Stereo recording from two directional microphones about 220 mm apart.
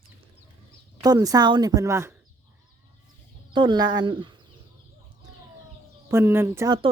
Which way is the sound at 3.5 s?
20° right (ahead or behind).